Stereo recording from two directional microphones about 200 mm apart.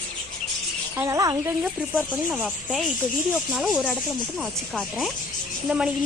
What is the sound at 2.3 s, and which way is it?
Speech, centre (ahead or behind).